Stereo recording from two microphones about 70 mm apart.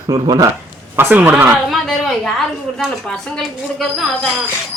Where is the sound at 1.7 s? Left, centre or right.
Centre.